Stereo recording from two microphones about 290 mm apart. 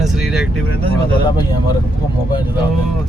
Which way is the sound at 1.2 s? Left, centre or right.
Centre.